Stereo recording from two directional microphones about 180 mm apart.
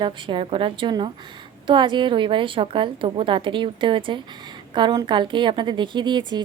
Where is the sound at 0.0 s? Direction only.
30° right (ahead or behind).